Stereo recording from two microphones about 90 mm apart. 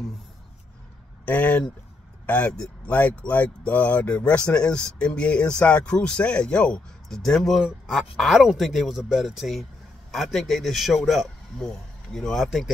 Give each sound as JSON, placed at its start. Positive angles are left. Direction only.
{"t": 1.2, "sound": "speech", "side_deg": 15}